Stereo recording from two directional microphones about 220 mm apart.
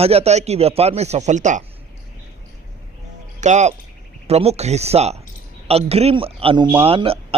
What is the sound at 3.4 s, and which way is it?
A man's voice, 30° right (ahead or behind).